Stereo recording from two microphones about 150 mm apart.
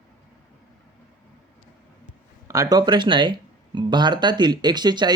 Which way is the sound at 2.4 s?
20° right (ahead or behind).